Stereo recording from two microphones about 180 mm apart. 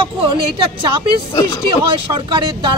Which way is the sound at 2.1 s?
25° right (ahead or behind).